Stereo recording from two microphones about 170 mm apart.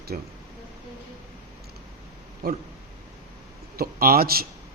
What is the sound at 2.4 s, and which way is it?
Speech, 60° right (ahead or behind).